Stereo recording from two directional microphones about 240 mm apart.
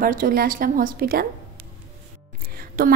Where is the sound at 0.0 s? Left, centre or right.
Right.